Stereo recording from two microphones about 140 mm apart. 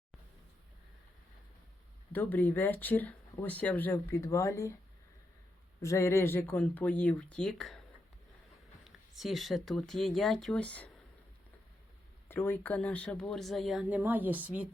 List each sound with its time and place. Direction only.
2.1 s speech: 15° left (ahead or behind)
5.8 s speech: 20° left (ahead or behind); by 7.8 s 5° left (ahead or behind)
8.8 s speech: centre (ahead or behind)
12.3 s speech: 15° left (ahead or behind); by 14.0 s centre (ahead or behind)
14.0 s speech: 15° right (ahead or behind)